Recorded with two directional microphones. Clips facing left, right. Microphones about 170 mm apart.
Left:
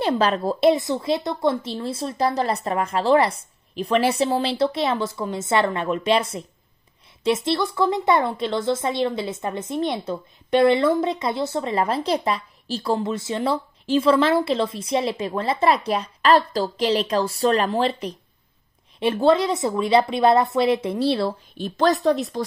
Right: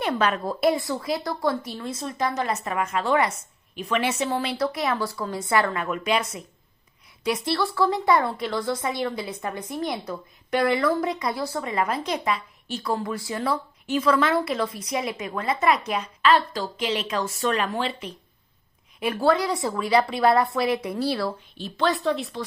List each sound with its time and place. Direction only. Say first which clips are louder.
0.0 s speech: left 4 dB; 30° left (ahead or behind)
18.9 s speech: left 4 dB; 25° left (ahead or behind)
21.5 s speech: left 5 dB; 45° left (ahead or behind)